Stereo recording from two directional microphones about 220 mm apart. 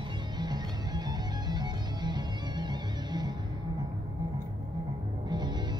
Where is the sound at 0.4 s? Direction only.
20° right (ahead or behind).